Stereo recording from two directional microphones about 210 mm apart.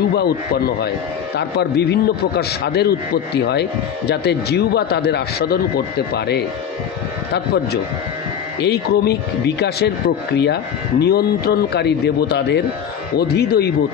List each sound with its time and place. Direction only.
0.1 s speech: 45° left (ahead or behind)
8.5 s speech: 50° left (ahead or behind)